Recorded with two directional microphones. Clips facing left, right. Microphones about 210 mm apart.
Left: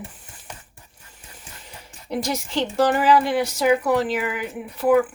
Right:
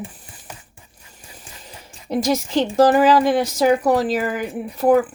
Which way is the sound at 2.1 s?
45° right (ahead or behind).